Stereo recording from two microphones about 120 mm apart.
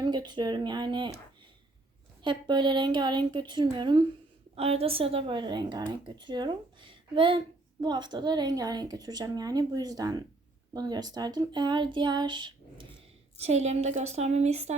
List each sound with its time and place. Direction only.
0.0 s speech: 35° right (ahead or behind)
2.2 s speech: 40° right (ahead or behind)
4.5 s a woman's voice: 55° right (ahead or behind); by 12.8 s 40° right (ahead or behind)
13.3 s a woman's voice: 65° right (ahead or behind)